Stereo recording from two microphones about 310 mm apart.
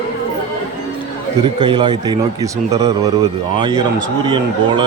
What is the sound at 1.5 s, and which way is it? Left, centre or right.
Speech, centre.